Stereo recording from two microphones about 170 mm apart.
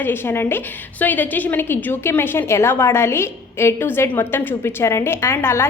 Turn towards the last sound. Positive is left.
turn(degrees=15)  # may be behind; listen again after turning